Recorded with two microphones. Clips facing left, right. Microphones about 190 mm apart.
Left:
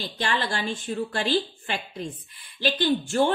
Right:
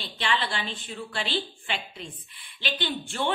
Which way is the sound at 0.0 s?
45° left (ahead or behind).